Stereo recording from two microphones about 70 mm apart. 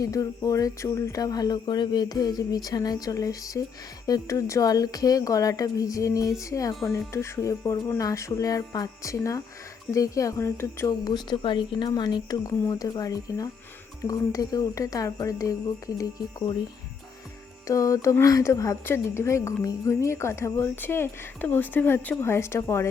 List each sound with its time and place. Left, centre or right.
0.0 s speech: left
6.4 s music: left
9.1 s music: left
11.0 s speech: left
12.5 s speech: left
17.7 s music: left
20.8 s speech: left